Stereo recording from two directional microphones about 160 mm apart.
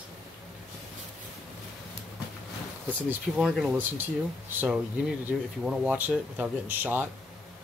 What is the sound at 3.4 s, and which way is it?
Speech, 5° right (ahead or behind).